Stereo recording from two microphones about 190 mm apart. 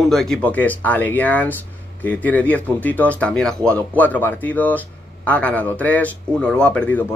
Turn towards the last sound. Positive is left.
turn(degrees=5)  # may be behind; listen again after turning